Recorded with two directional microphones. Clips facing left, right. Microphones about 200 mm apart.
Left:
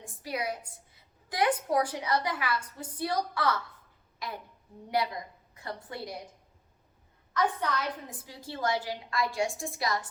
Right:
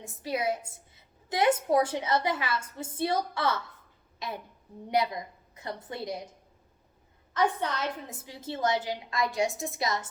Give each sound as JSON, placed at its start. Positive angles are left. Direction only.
{"t": 0.0, "sound": "a woman's voice", "side_deg": -25}
{"t": 5.5, "sound": "a woman's voice", "side_deg": -20}
{"t": 7.3, "sound": "a woman's voice", "side_deg": -25}